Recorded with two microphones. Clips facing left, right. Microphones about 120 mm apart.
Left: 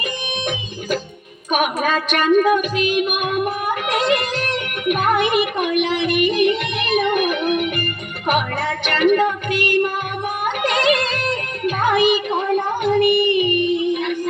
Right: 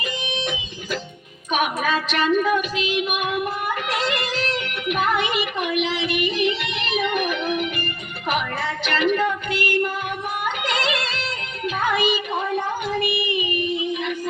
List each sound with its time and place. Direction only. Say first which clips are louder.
1.5 s speech: left 3 dB; 55° left (ahead or behind)
8.9 s speech: left 5 dB; 55° left (ahead or behind)
10.4 s music: left 8 dB; 55° left (ahead or behind)